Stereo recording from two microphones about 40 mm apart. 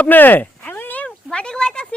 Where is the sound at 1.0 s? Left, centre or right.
Left.